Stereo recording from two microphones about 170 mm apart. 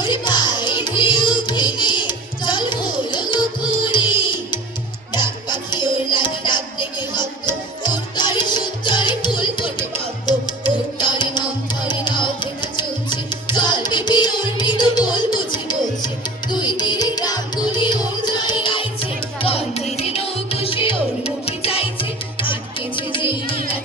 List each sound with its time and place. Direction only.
0.0 s music: 25° left (ahead or behind)
1.4 s carnatic music: 25° left (ahead or behind)
5.1 s music: 25° left (ahead or behind)
7.8 s music: 25° left (ahead or behind)